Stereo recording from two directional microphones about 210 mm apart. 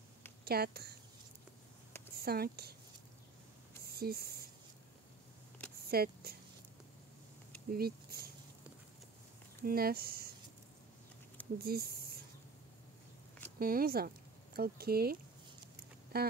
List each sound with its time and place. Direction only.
0.5 s speech: 50° right (ahead or behind)
2.1 s speech: 45° right (ahead or behind)
3.8 s a sound: 45° right (ahead or behind)
5.9 s speech: 45° right (ahead or behind)
7.7 s speech: 45° right (ahead or behind)
9.6 s speech: 45° right (ahead or behind)
11.5 s speech: 45° right (ahead or behind)
13.6 s speech: 45° right (ahead or behind)